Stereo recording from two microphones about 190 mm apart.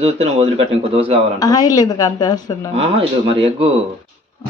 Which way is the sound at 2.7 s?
30° right (ahead or behind).